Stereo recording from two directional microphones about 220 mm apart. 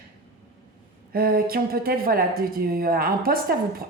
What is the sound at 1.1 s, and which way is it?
Speech, 45° right (ahead or behind).